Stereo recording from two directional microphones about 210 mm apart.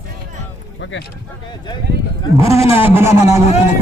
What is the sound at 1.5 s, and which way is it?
Speech, 20° left (ahead or behind).